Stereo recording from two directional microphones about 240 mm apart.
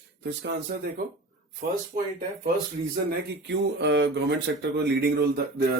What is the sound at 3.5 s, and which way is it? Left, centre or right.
Speech, right.